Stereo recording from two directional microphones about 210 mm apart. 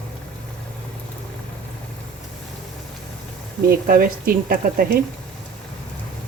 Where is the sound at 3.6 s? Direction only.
45° right (ahead or behind).